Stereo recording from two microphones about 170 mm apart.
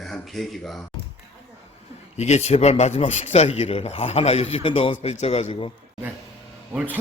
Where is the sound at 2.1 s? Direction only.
40° left (ahead or behind).